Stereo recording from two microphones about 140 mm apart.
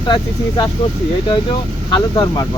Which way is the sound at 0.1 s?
35° left (ahead or behind).